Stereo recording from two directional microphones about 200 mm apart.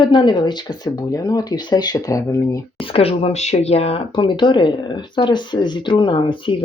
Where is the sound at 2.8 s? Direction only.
30° left (ahead or behind).